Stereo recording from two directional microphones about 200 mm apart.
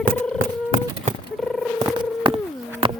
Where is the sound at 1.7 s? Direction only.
25° right (ahead or behind).